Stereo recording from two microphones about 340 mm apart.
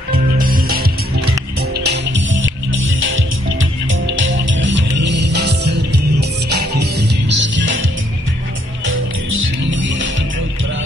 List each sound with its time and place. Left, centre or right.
0.4 s music: right
8.8 s music: right